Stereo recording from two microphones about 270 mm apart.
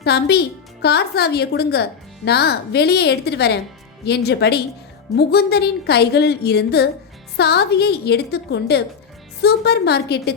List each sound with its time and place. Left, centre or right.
0.0 s a woman's voice: left